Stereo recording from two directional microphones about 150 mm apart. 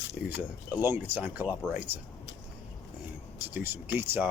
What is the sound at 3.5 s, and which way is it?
Speech, 15° right (ahead or behind).